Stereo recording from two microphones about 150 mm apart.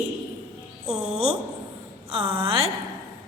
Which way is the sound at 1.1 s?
40° right (ahead or behind).